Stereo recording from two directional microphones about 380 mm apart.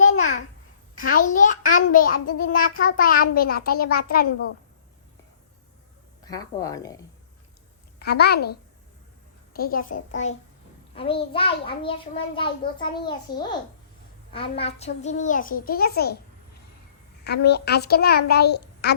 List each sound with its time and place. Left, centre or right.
0.0 s babbling: left
0.9 s a child's voice: left
6.2 s a child's voice: centre
7.9 s a woman's voice: left
13.0 s a child's voice: centre
17.2 s a child's voice: left